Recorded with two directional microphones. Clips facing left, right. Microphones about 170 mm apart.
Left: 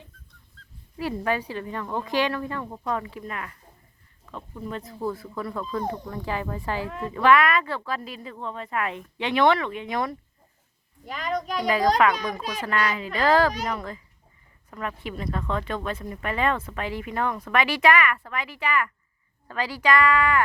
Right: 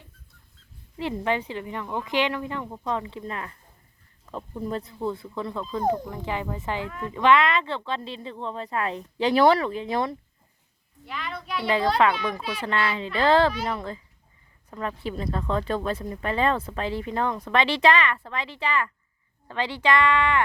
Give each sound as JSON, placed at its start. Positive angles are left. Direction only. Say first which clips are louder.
{"t": 0.9, "sound": "speech", "louder": "even", "side_deg": -20}
{"t": 5.0, "sound": "speech", "louder": "left 1 dB", "side_deg": -20}
{"t": 11.0, "sound": "a woman's voice", "louder": "left 6 dB", "side_deg": 40}
{"t": 12.6, "sound": "speech", "louder": "even", "side_deg": -25}